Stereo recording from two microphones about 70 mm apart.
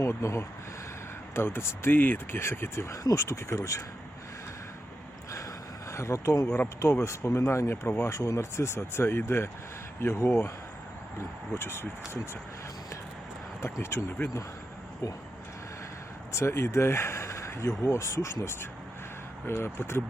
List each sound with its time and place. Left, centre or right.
0.0 s speech: left
5.9 s speech: left
8.1 s speech: left
13.6 s speech: left
16.3 s speech: left
19.5 s speech: left